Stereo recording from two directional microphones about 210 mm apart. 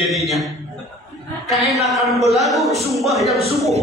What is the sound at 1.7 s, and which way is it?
A man's voice, centre (ahead or behind).